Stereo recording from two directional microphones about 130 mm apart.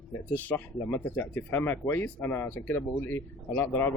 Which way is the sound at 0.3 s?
15° left (ahead or behind).